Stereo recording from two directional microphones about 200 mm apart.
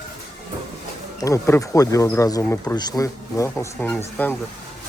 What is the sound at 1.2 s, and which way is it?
Speech, 15° left (ahead or behind).